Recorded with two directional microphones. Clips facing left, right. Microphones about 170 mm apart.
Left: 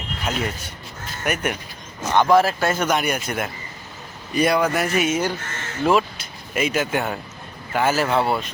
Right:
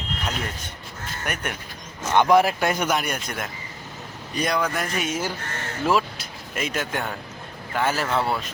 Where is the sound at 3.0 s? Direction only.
5° left (ahead or behind).